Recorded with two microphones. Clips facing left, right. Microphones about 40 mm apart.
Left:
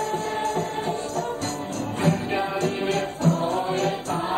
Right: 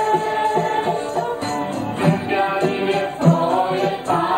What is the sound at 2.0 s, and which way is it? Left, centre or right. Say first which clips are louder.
Music: right 6 dB; right.